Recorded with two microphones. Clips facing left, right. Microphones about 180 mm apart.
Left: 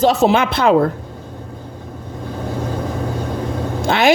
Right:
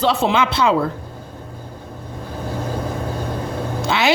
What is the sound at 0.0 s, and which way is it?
Speech, 45° left (ahead or behind).